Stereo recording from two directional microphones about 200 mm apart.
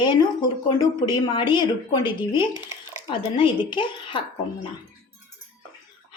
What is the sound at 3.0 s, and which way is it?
A woman's voice, 25° left (ahead or behind).